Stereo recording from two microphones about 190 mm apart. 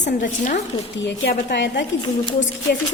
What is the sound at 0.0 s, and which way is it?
Speech, 40° left (ahead or behind).